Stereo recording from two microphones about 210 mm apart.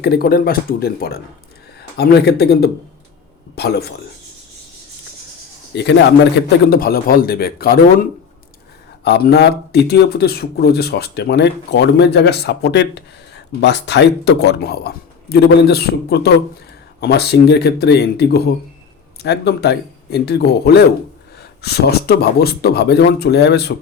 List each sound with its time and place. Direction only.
0.0 s speech: 50° left (ahead or behind)
5.7 s speech: 55° left (ahead or behind)
6.7 s speech: 45° left (ahead or behind)
9.0 s speech: 50° left (ahead or behind)